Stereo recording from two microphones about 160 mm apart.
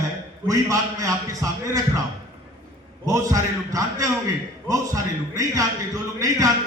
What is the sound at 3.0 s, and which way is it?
A man's voice, 20° right (ahead or behind).